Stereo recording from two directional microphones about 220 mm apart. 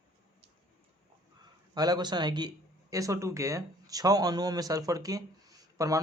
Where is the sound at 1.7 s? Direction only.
15° right (ahead or behind).